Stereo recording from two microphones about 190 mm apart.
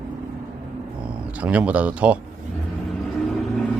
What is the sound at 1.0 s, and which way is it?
Speech, 5° right (ahead or behind).